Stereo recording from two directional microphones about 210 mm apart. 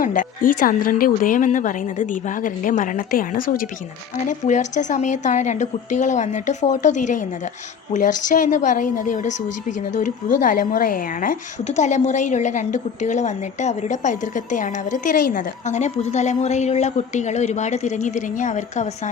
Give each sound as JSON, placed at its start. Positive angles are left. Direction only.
{"t": 0.0, "sound": "a woman's voice", "side_deg": 40}